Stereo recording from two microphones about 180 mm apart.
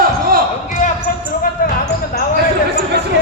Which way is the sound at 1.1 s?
50° left (ahead or behind).